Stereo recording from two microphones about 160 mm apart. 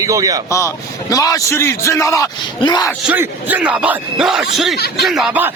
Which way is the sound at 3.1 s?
10° right (ahead or behind).